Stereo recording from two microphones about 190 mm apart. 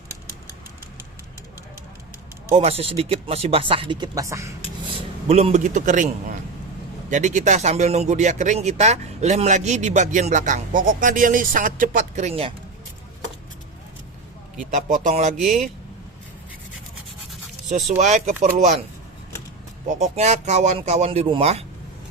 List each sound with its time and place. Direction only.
2.5 s speech: 35° right (ahead or behind); by 4.5 s 15° right (ahead or behind)
5.3 s speech: 35° right (ahead or behind)
14.7 s speech: 40° right (ahead or behind)
17.7 s speech: 35° right (ahead or behind)
19.9 s speech: 35° right (ahead or behind)